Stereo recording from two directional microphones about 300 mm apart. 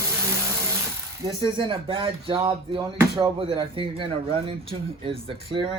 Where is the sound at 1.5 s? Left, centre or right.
Centre.